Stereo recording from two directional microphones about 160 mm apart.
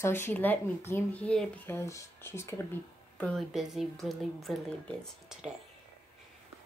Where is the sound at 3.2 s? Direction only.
Centre (ahead or behind).